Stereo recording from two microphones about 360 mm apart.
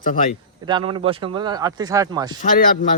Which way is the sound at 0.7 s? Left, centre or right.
Centre.